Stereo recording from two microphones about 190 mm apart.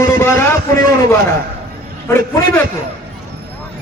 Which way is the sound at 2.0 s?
10° left (ahead or behind).